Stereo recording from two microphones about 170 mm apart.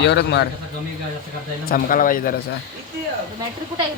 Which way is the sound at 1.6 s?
55° left (ahead or behind).